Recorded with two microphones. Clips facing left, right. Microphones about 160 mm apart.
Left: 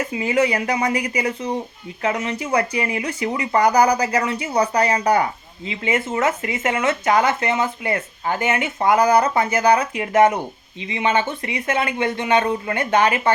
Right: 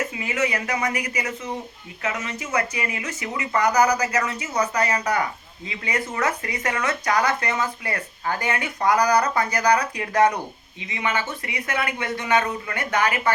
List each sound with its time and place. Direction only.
0.2 s speech: 30° left (ahead or behind)